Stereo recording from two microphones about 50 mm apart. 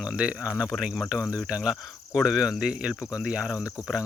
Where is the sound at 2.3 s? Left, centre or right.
Centre.